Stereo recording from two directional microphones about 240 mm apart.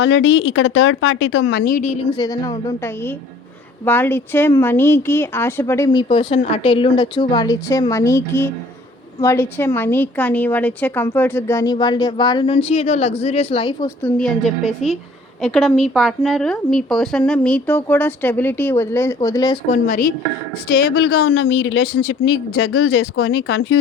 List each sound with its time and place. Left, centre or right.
0.0 s speech: left
2.2 s a woman's voice: centre
19.6 s speech: left
20.7 s speech: left
22.5 s speech: left
23.5 s speech: left